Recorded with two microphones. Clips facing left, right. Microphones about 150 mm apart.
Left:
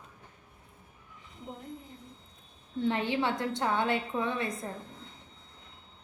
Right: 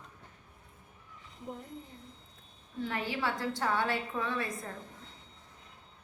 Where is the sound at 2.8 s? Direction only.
25° left (ahead or behind).